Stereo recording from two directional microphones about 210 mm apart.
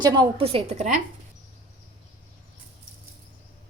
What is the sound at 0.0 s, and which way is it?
A woman's voice, 25° right (ahead or behind).